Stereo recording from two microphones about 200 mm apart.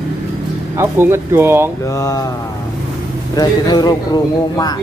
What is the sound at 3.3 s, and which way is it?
Speech, 20° left (ahead or behind).